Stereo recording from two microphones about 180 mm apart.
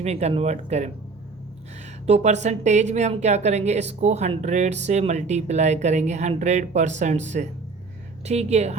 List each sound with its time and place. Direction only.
0.0 s a woman's voice: 35° right (ahead or behind)
2.0 s a woman's voice: 40° right (ahead or behind)